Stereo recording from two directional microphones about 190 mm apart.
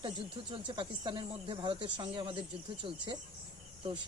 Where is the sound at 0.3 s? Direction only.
25° right (ahead or behind).